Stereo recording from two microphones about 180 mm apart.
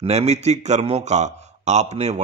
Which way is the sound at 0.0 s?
35° right (ahead or behind).